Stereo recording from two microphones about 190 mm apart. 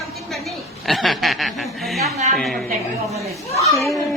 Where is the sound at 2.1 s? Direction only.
35° right (ahead or behind).